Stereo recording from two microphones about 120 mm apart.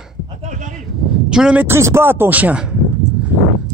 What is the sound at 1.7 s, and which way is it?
A man's voice, 20° right (ahead or behind).